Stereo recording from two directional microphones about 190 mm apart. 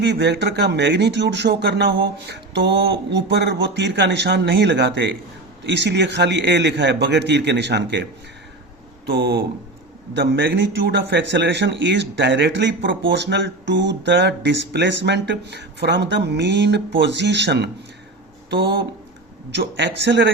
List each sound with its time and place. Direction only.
0.0 s speech: 65° right (ahead or behind)
9.0 s a man's voice: 60° right (ahead or behind)
19.5 s a man's voice: 65° right (ahead or behind)